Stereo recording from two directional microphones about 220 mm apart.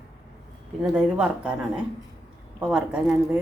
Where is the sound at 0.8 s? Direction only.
5° right (ahead or behind).